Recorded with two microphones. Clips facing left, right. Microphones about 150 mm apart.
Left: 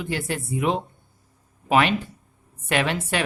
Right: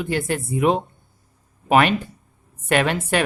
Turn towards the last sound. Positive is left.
turn(degrees=-50)  # may be behind; listen again after turning